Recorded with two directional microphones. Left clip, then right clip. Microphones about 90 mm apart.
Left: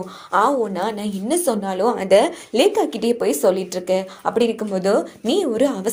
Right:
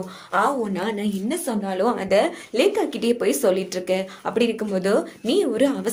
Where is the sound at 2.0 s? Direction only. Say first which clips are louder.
Left 5 dB; 50° left (ahead or behind).